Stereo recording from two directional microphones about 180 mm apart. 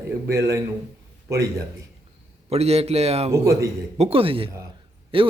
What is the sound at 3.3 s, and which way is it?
Speech, 15° right (ahead or behind).